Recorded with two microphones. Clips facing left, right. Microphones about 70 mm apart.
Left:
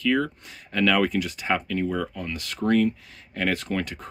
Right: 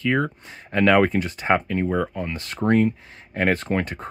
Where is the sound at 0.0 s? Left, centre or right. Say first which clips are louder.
Right 1 dB; right.